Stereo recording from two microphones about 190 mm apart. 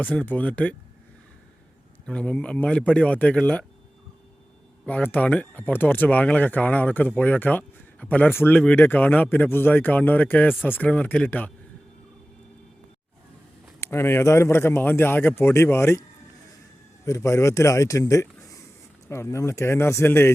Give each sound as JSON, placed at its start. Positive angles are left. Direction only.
{"t": 0.0, "sound": "speech", "side_deg": 5}
{"t": 2.0, "sound": "speech", "side_deg": 5}
{"t": 4.9, "sound": "speech", "side_deg": 10}
{"t": 13.8, "sound": "speech", "side_deg": 15}
{"t": 17.1, "sound": "speech", "side_deg": 15}